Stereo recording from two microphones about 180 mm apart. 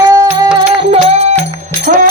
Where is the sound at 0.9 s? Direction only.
35° right (ahead or behind).